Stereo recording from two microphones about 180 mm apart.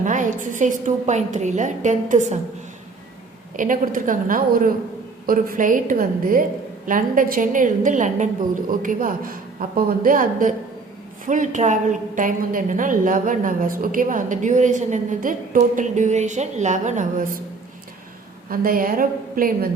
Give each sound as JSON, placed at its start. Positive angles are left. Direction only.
{"t": 0.0, "sound": "a woman's voice", "side_deg": -45}
{"t": 3.6, "sound": "a woman's voice", "side_deg": -50}
{"t": 18.4, "sound": "a woman's voice", "side_deg": -50}